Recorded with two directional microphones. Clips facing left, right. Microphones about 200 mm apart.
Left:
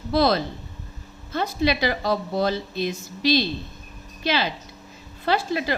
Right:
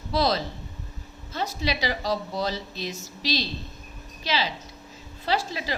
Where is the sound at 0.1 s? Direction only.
55° left (ahead or behind).